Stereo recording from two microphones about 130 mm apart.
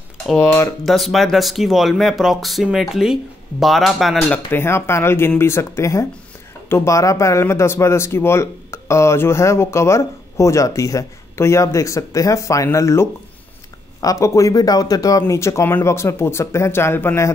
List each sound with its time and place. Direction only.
0.4 s speech: 20° left (ahead or behind)
0.8 s speech: centre (ahead or behind)
4.3 s speech: 15° left (ahead or behind)